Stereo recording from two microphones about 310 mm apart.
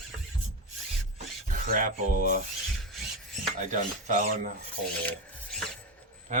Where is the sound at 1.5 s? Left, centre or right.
Right.